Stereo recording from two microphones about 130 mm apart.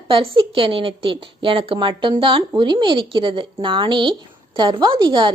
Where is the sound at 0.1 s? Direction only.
40° right (ahead or behind).